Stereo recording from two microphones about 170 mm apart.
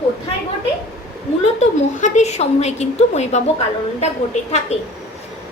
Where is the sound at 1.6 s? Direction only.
45° left (ahead or behind).